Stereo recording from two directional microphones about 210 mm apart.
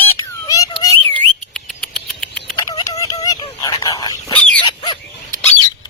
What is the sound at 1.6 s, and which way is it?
Rodents, 5° left (ahead or behind).